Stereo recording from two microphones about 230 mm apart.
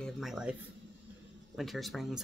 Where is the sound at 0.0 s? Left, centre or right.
Centre.